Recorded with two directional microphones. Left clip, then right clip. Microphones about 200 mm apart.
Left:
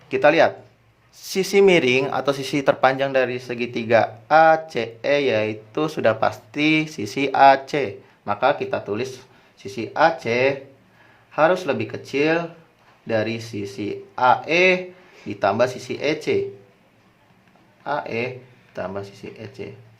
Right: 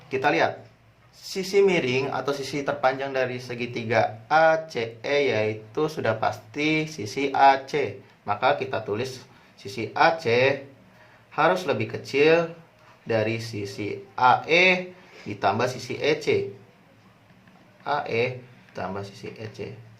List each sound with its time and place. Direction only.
0.1 s speech: 35° left (ahead or behind)
17.8 s speech: 30° left (ahead or behind)